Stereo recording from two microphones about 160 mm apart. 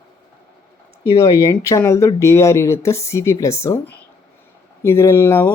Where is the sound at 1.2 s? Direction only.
20° left (ahead or behind).